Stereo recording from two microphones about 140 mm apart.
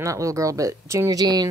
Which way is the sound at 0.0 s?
25° right (ahead or behind).